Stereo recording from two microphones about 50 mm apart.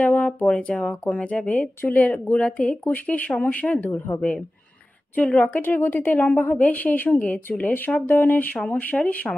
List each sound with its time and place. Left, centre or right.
0.0 s speech: left
0.6 s a woman's voice: left
5.1 s speech: left
5.6 s a woman's voice: left